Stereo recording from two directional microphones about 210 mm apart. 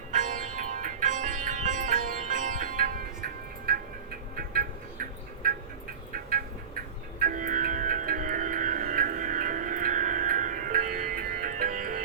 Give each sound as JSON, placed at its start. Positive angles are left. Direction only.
{"t": 0.1, "sound": "sitar", "side_deg": -35}
{"t": 4.4, "sound": "music", "side_deg": -45}